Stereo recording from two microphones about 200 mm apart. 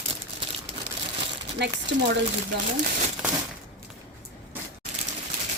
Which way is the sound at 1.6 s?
60° right (ahead or behind).